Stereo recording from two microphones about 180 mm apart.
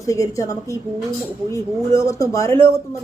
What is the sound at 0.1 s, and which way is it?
Speech, 20° left (ahead or behind).